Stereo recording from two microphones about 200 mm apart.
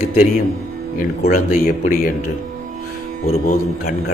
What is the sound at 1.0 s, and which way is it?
Speech, 40° left (ahead or behind).